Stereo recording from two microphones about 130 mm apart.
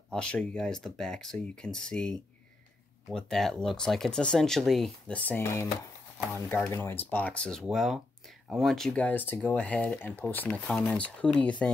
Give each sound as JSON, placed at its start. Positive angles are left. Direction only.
{"t": 0.1, "sound": "speech", "side_deg": 5}
{"t": 7.6, "sound": "speech", "side_deg": 0}